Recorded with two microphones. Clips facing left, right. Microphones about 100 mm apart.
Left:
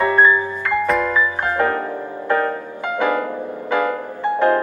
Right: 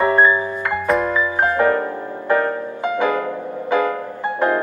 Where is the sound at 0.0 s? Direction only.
20° right (ahead or behind).